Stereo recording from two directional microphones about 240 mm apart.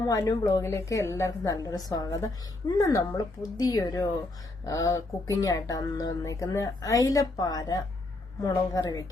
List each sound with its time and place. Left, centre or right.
0.1 s a woman's voice: centre